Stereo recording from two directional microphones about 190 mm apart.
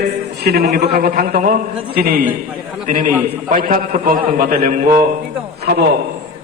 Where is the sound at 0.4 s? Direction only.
55° right (ahead or behind).